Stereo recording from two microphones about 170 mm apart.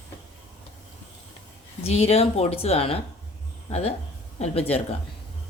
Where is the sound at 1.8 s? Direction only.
40° left (ahead or behind).